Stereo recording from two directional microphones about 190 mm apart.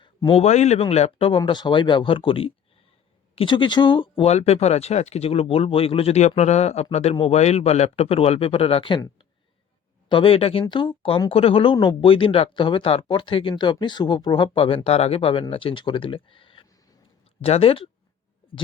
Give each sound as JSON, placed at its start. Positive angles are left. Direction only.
{"t": 0.0, "sound": "speech", "side_deg": 25}
{"t": 10.1, "sound": "speech", "side_deg": 30}